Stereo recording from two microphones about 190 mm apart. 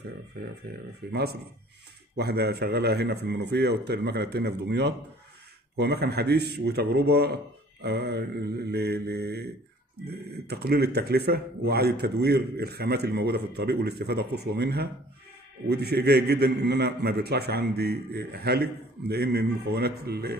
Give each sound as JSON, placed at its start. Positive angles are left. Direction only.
{"t": 0.7, "sound": "speech", "side_deg": -60}